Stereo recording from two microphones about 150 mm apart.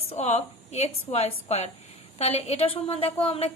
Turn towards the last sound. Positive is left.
turn(degrees=40)  # may be behind; listen again after turning